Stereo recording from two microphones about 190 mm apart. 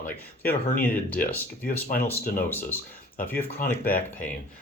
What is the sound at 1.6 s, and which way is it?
Speech, 50° left (ahead or behind).